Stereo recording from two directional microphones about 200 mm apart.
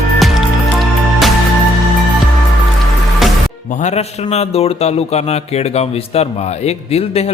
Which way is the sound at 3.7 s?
35° left (ahead or behind).